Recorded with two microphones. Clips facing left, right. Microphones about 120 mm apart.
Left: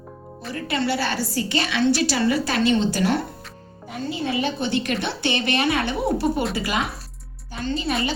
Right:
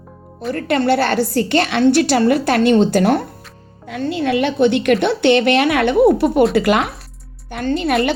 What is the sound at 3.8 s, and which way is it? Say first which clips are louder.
A woman's voice: right 7 dB; 80° right.